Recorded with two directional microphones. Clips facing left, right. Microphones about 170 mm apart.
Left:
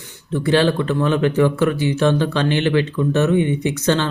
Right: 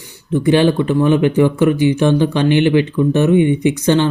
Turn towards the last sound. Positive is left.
turn(degrees=-15)  # may be behind; listen again after turning